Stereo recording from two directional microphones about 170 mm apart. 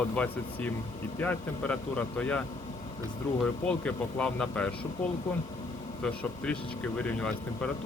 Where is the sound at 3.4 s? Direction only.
5° left (ahead or behind).